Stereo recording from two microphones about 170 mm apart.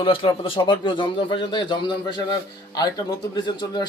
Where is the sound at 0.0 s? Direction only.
30° left (ahead or behind).